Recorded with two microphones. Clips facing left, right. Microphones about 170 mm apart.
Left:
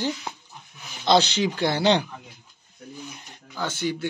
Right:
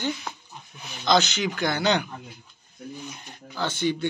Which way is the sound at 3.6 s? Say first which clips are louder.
Right 2 dB; 10° left (ahead or behind).